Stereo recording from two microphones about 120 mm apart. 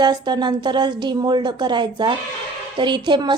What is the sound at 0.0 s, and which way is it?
A woman's voice, 35° right (ahead or behind).